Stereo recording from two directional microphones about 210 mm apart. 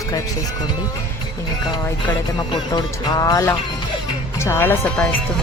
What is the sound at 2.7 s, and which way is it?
Speech, 15° left (ahead or behind).